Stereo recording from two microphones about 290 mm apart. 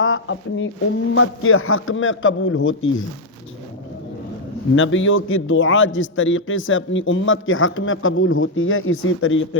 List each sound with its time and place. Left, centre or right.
0.0 s a man's voice: left
4.7 s a man's voice: left